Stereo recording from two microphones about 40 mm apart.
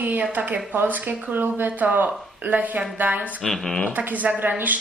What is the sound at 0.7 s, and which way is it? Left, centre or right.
Speech, right.